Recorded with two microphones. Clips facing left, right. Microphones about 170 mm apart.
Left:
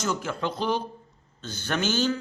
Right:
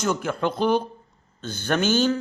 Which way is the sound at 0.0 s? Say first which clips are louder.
Right 4 dB; 55° right (ahead or behind).